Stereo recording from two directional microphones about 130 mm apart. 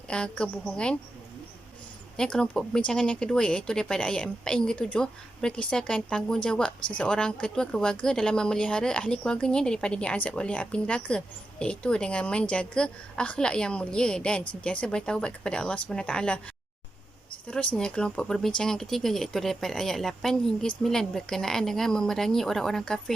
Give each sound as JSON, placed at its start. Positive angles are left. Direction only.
{"t": 0.1, "sound": "speech", "side_deg": 5}
{"t": 2.1, "sound": "speech", "side_deg": 5}
{"t": 17.5, "sound": "speech", "side_deg": 10}